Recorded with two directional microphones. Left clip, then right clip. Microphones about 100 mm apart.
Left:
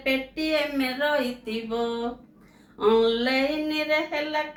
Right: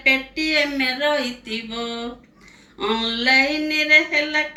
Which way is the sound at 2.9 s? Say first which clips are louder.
Right 4 dB; 40° left (ahead or behind).